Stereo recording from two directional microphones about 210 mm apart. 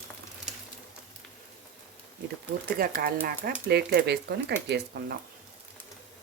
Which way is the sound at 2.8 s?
45° right (ahead or behind).